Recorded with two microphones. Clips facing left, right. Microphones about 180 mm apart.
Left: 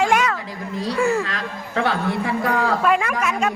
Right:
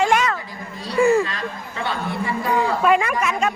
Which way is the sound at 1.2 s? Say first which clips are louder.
Right 2 dB; 90° left.